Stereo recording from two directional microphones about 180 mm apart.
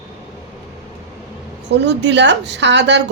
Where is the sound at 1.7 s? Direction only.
75° right (ahead or behind).